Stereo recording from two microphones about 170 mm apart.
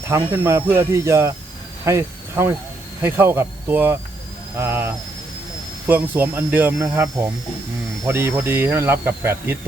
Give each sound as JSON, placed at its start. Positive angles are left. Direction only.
{"t": 0.1, "sound": "speech", "side_deg": -15}